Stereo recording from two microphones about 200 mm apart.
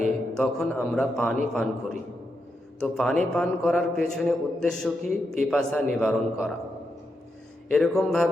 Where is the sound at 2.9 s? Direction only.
Centre (ahead or behind).